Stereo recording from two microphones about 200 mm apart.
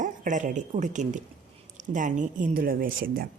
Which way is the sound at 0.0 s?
40° right (ahead or behind).